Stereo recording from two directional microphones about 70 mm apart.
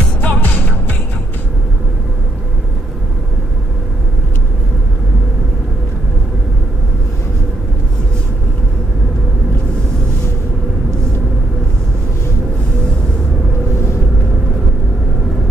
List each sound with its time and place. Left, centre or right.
0.2 s music: left